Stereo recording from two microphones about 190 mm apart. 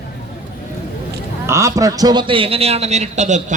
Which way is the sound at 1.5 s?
15° right (ahead or behind).